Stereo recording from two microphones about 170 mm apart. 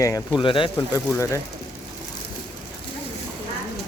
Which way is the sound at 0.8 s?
15° left (ahead or behind).